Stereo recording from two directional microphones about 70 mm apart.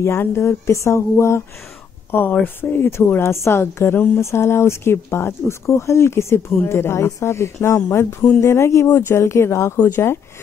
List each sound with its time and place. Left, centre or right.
0.0 s speech: left
2.0 s speech: left
9.8 s speech: left